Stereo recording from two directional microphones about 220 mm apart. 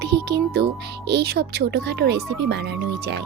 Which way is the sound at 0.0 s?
50° right (ahead or behind).